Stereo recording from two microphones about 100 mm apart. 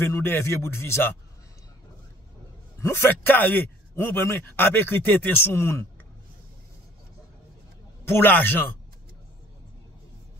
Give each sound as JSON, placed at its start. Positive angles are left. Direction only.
{"t": 0.0, "sound": "a man's voice", "side_deg": 20}
{"t": 2.8, "sound": "a man's voice", "side_deg": 25}
{"t": 8.1, "sound": "a man's voice", "side_deg": 20}